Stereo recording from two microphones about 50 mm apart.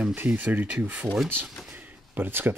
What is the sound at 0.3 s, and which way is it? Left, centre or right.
Speech, right.